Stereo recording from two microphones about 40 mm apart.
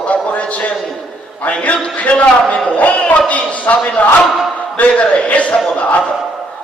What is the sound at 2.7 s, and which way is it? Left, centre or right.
Music, left.